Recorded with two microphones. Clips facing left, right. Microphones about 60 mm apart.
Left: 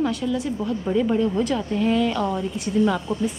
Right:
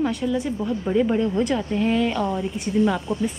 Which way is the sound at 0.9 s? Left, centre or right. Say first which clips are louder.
Even; centre.